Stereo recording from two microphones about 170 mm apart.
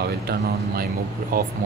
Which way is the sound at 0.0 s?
65° right (ahead or behind).